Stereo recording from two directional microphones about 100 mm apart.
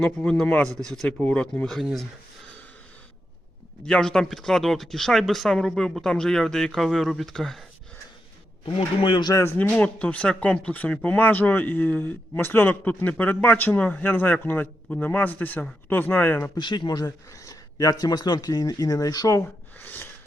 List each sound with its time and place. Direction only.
0.0 s speech: 10° left (ahead or behind)
1.2 s speech: 15° left (ahead or behind)
3.8 s speech: 5° left (ahead or behind)
8.6 s a man's voice: 55° left (ahead or behind)
9.4 s a man's voice: 25° left (ahead or behind)
9.6 s a man's voice: 15° left (ahead or behind)
16.6 s speech: 50° left (ahead or behind)
19.8 s a man's voice: 20° left (ahead or behind)